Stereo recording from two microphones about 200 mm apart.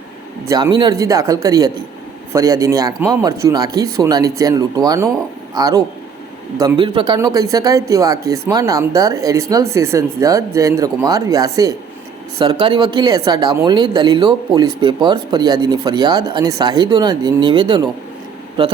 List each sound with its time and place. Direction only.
0.4 s speech: 20° right (ahead or behind)